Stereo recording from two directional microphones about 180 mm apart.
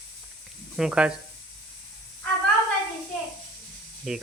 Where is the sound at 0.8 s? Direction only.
5° right (ahead or behind).